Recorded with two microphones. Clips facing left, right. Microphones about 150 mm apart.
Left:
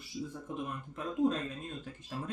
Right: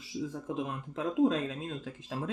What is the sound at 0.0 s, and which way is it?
Speech, 90° right.